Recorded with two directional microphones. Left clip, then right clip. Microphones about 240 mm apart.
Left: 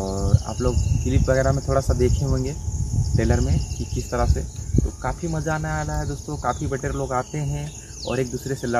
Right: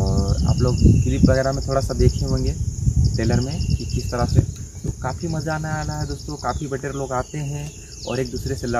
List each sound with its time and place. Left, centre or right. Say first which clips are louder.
0.0 s speech: right 1 dB; centre